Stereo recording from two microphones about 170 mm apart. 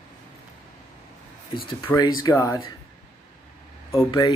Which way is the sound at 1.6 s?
25° left (ahead or behind).